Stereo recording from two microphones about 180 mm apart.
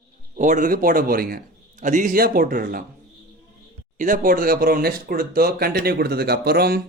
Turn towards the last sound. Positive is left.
turn(degrees=-60)  # may be behind; listen again after turning